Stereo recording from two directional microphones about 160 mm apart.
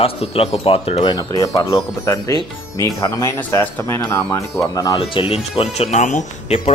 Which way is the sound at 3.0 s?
20° left (ahead or behind).